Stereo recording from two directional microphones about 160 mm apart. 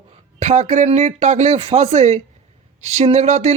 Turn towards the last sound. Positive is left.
turn(degrees=-45)  # may be behind; listen again after turning